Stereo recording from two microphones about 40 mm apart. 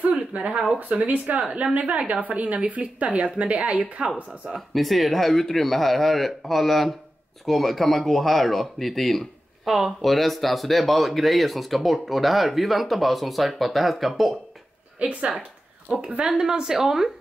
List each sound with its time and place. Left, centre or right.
0.0 s a sound: right
0.7 s a woman's voice: right
4.6 s speech: centre
9.7 s a woman's voice: centre
10.0 s speech: centre
15.0 s a woman's voice: right
15.9 s a woman's voice: right